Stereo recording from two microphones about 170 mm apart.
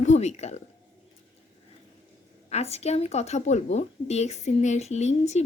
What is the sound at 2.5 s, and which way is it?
A woman's voice, 40° left (ahead or behind).